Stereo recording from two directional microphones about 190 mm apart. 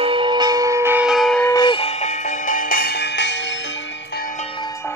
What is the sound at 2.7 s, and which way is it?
Music, 50° left (ahead or behind).